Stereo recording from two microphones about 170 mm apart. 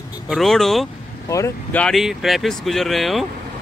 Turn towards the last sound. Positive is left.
turn(degrees=0)  # may be behind; listen again after turning